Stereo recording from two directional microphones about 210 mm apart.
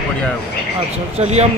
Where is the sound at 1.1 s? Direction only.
30° right (ahead or behind).